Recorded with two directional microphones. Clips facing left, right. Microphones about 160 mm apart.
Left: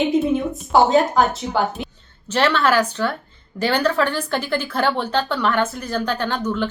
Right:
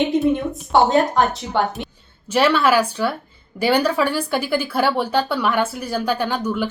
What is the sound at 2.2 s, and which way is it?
Speech, 10° right (ahead or behind).